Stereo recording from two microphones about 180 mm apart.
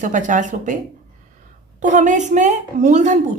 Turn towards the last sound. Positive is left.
turn(degrees=-40)  # may be behind; listen again after turning